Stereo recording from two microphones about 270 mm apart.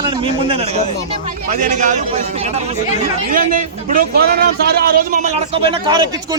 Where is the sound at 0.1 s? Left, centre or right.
Centre.